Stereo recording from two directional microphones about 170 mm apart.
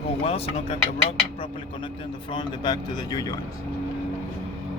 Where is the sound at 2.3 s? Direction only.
25° left (ahead or behind).